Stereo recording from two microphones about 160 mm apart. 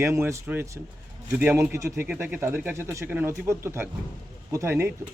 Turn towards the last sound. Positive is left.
turn(degrees=-15)  # may be behind; listen again after turning